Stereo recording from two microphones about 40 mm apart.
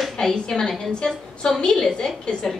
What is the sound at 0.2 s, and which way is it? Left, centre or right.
A woman's voice, centre.